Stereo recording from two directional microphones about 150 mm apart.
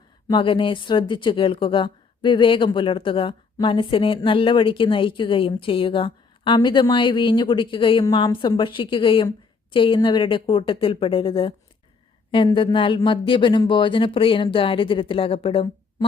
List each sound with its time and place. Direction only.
0.3 s speech: 35° left (ahead or behind)
12.5 s speech: 35° left (ahead or behind)